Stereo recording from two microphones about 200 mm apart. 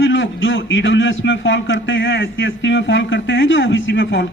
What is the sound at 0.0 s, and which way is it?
A man's voice, 65° left (ahead or behind).